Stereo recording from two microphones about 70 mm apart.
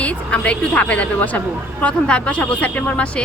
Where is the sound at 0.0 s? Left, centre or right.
Centre.